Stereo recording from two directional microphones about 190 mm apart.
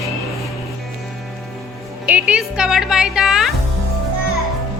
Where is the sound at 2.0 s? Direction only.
5° right (ahead or behind).